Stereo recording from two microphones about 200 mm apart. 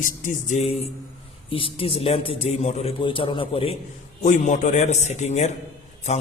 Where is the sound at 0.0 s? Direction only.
40° left (ahead or behind).